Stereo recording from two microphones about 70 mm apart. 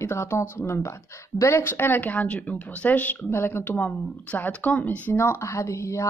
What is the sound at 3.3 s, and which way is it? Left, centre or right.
Speech, left.